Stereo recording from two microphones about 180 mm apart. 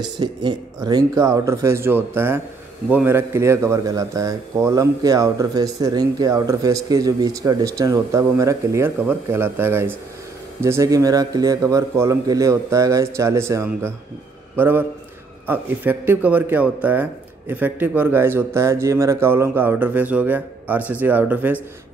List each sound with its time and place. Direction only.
0.2 s a man's voice: 25° right (ahead or behind)